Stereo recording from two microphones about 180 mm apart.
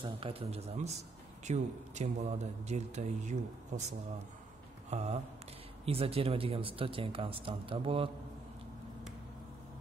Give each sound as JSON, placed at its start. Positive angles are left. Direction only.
{"t": 0.0, "sound": "a man's voice", "side_deg": -30}
{"t": 4.9, "sound": "a man's voice", "side_deg": -40}